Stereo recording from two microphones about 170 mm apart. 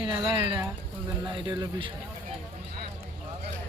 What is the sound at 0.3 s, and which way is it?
Speech, 35° right (ahead or behind).